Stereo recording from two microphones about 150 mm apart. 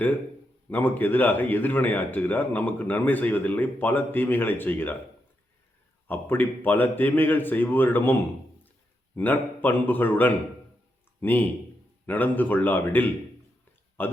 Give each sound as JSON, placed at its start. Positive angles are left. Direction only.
{"t": 0.7, "sound": "a man's voice", "side_deg": 10}
{"t": 6.1, "sound": "a man's voice", "side_deg": 10}